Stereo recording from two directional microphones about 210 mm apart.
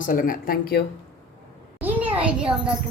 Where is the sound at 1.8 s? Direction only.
10° right (ahead or behind).